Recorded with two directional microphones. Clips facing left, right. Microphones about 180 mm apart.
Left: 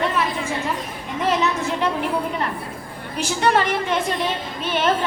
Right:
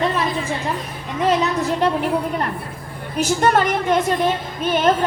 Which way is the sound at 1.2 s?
40° right (ahead or behind).